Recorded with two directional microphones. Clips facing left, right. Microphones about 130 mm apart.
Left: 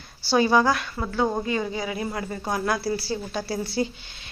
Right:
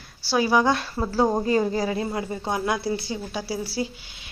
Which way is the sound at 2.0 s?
20° right (ahead or behind).